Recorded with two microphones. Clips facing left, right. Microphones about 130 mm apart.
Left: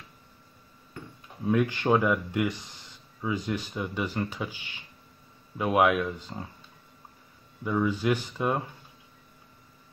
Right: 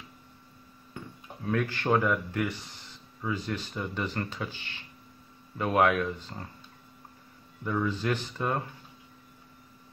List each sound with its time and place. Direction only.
1.4 s speech: 15° left (ahead or behind)
7.6 s speech: 10° left (ahead or behind)